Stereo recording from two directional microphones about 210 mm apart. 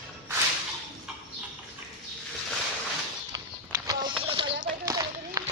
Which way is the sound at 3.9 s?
25° right (ahead or behind).